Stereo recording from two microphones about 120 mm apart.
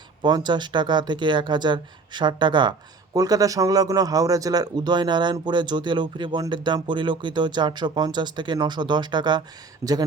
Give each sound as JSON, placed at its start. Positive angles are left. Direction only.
{"t": 0.2, "sound": "a man's voice", "side_deg": -35}
{"t": 9.8, "sound": "speech", "side_deg": -25}